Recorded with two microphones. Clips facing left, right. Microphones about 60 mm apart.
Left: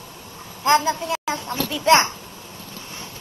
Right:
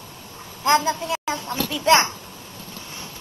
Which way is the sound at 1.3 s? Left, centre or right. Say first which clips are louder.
Left 1 dB; left.